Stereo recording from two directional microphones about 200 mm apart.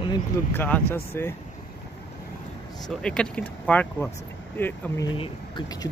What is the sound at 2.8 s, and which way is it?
Speech, 5° left (ahead or behind).